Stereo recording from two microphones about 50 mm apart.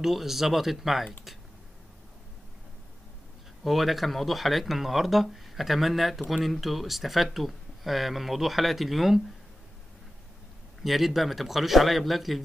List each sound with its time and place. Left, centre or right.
0.0 s speech: centre
3.6 s speech: centre
10.8 s speech: centre